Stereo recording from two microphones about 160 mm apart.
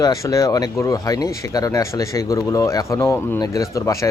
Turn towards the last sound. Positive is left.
turn(degrees=20)  # may be behind; listen again after turning